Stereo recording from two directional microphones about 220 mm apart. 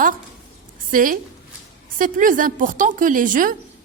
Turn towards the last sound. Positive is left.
turn(degrees=-35)  # may be behind; listen again after turning